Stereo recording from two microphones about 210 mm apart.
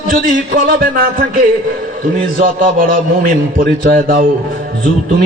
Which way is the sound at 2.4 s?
40° right (ahead or behind).